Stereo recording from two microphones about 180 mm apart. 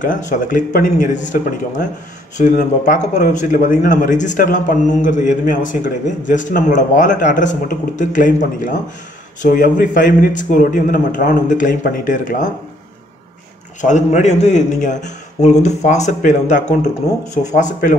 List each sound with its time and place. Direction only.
0.0 s speech: 45° left (ahead or behind)
13.7 s a man's voice: 40° left (ahead or behind)